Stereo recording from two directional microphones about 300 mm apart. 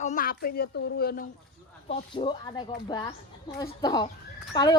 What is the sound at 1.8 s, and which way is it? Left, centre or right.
Speech, centre.